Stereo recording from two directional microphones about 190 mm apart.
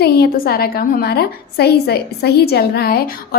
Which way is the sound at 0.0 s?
55° left (ahead or behind).